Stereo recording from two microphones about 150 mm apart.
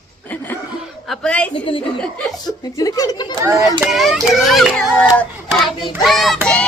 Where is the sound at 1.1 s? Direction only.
5° left (ahead or behind).